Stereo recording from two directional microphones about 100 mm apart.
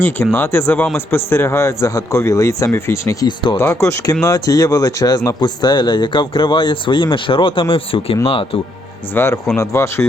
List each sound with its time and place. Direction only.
0.3 s a man's voice: 25° left (ahead or behind)
3.2 s speech: 50° left (ahead or behind)
3.8 s speech: 30° left (ahead or behind); by 8.4 s 60° left (ahead or behind)
9.1 s a man's voice: 25° left (ahead or behind)